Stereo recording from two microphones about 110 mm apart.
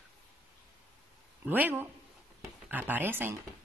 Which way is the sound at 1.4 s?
15° right (ahead or behind).